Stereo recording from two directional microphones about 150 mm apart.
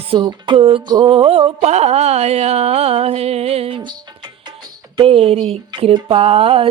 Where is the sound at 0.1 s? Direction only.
30° right (ahead or behind).